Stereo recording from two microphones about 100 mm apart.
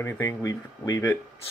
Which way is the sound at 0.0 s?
30° left (ahead or behind).